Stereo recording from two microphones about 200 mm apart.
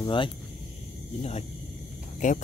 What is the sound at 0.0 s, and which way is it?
Speech, 25° left (ahead or behind).